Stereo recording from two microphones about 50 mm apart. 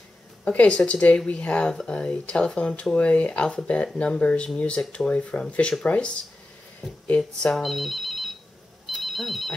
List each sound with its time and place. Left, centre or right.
0.5 s speech: left
6.8 s speech: centre
8.8 s telephone bell ringing: centre